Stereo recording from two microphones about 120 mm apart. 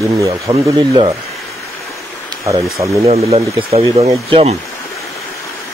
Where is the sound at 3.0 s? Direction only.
60° right (ahead or behind).